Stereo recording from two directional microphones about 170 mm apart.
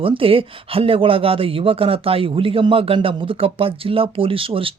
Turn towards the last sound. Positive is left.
turn(degrees=-30)  # may be behind; listen again after turning